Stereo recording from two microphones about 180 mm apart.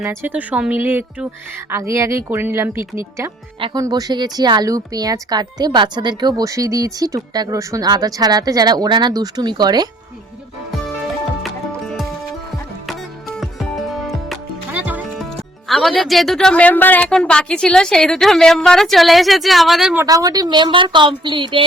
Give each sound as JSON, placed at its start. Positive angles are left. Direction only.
{"t": 0.0, "sound": "speech", "side_deg": -15}
{"t": 11.4, "sound": "music", "side_deg": 0}
{"t": 13.9, "sound": "music", "side_deg": 0}
{"t": 14.7, "sound": "music", "side_deg": -10}
{"t": 15.7, "sound": "a woman's voice", "side_deg": 0}
{"t": 20.1, "sound": "speech", "side_deg": -20}